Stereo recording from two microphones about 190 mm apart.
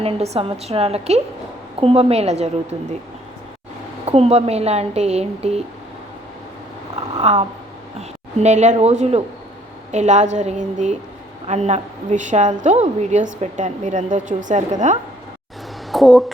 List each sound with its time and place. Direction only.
0.0 s a woman's voice: 30° right (ahead or behind)
4.0 s a woman's voice: 30° right (ahead or behind)
6.9 s a sound: 35° right (ahead or behind)
7.9 s a woman's voice: 35° right (ahead or behind)
15.9 s speech: centre (ahead or behind)